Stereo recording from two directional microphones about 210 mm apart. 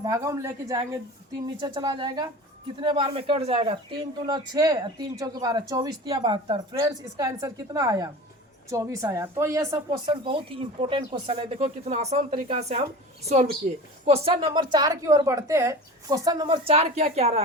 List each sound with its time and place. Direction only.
0.0 s a woman's voice: 15° right (ahead or behind); by 17.4 s 30° right (ahead or behind)